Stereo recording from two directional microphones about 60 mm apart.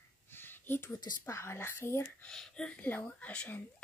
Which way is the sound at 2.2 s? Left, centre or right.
Centre.